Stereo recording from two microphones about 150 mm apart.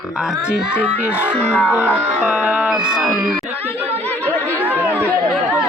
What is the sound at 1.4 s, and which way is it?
Speech, 10° left (ahead or behind).